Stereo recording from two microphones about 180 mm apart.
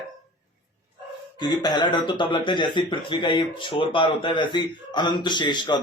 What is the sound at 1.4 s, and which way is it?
Speech, 20° left (ahead or behind).